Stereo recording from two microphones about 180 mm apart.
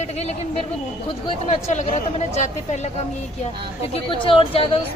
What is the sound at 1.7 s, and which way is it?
A woman's voice, 40° left (ahead or behind).